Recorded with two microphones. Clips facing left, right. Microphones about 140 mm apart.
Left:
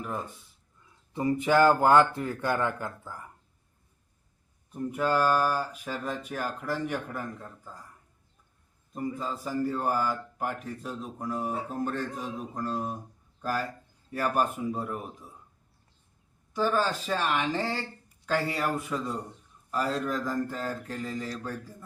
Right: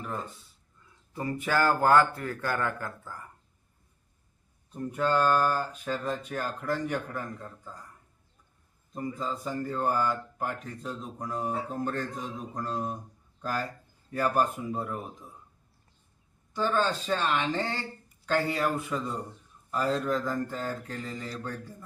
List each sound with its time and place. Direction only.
0.0 s a man's voice: 15° left (ahead or behind)
4.7 s speech: 5° left (ahead or behind)
8.9 s a man's voice: 5° left (ahead or behind)
14.1 s a man's voice: 5° left (ahead or behind)
16.6 s a man's voice: 5° left (ahead or behind)